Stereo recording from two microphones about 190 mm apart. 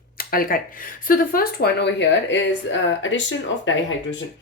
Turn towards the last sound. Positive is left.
turn(degrees=75)  # may be behind; listen again after turning